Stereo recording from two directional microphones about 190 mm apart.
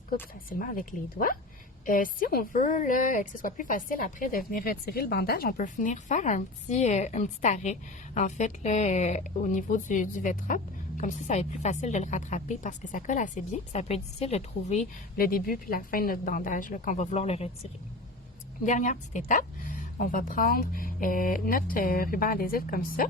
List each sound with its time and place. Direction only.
0.6 s a woman's voice: 45° left (ahead or behind)
15.4 s a woman's voice: 50° left (ahead or behind); by 17.5 s 35° left (ahead or behind)
18.6 s a woman's voice: 40° left (ahead or behind)